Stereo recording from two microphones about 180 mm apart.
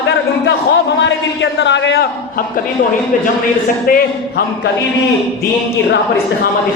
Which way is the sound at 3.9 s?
55° left (ahead or behind).